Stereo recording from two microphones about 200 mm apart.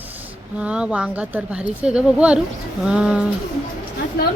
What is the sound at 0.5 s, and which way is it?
Speech, 5° right (ahead or behind).